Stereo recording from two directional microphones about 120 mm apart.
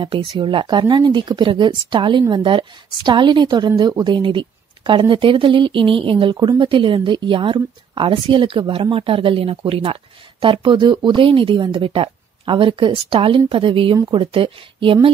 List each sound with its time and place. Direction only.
0.0 s speech: 50° right (ahead or behind)
13.9 s speech: 35° right (ahead or behind)